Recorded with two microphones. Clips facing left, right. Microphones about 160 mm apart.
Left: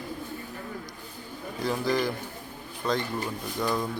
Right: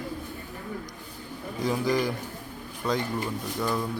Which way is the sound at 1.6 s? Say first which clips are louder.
Right 1 dB; 15° right (ahead or behind).